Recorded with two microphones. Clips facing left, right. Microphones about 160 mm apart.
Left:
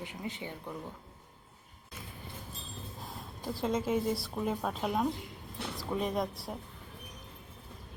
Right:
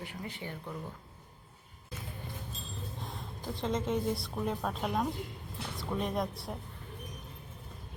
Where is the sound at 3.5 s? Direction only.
5° left (ahead or behind).